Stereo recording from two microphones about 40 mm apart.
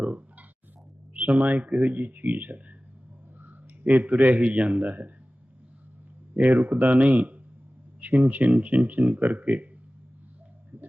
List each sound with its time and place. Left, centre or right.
0.0 s a sound: right
1.1 s speech: right
6.3 s speech: right
7.0 s speech: right